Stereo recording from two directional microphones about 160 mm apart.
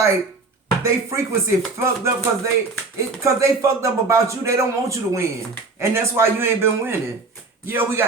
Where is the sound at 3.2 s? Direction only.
20° right (ahead or behind).